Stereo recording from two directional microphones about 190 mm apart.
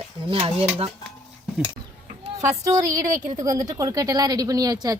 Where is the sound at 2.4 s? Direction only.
15° right (ahead or behind).